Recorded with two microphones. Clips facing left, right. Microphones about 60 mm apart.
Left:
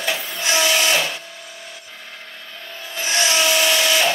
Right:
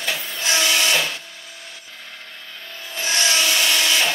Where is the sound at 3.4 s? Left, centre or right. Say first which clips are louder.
Left 2 dB; centre.